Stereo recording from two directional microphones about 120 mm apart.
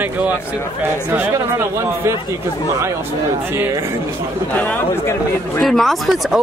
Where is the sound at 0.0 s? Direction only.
15° right (ahead or behind).